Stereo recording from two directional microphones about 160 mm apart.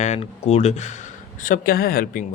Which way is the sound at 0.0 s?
45° left (ahead or behind).